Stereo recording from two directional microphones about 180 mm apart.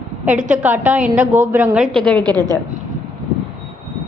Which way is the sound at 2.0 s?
5° left (ahead or behind).